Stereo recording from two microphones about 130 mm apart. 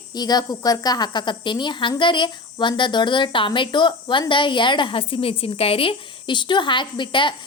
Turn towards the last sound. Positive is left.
turn(degrees=40)  # may be behind; listen again after turning